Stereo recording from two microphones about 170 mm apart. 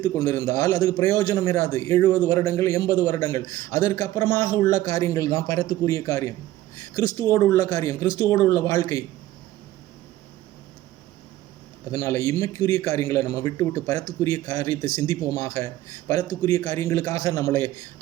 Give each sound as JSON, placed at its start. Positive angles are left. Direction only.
{"t": 0.0, "sound": "a man's voice", "side_deg": 20}
{"t": 11.9, "sound": "a man's voice", "side_deg": 20}